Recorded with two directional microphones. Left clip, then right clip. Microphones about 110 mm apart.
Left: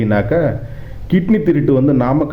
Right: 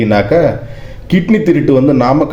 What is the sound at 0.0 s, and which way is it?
A man's voice, 25° right (ahead or behind).